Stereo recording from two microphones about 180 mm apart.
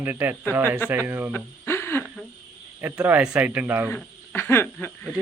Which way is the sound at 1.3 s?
15° left (ahead or behind).